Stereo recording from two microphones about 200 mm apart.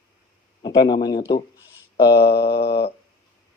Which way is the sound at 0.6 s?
20° left (ahead or behind).